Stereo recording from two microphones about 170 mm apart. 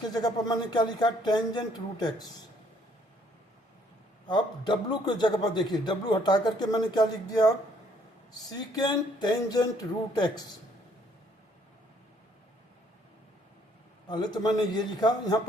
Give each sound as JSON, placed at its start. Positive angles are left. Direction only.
{"t": 0.0, "sound": "a man's voice", "side_deg": 25}
{"t": 4.3, "sound": "a man's voice", "side_deg": 25}
{"t": 14.1, "sound": "a man's voice", "side_deg": 25}